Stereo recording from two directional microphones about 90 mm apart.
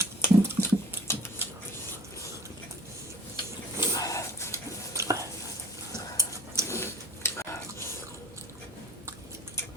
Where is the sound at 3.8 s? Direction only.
40° left (ahead or behind).